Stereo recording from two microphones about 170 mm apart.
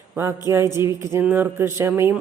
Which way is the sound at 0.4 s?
15° right (ahead or behind).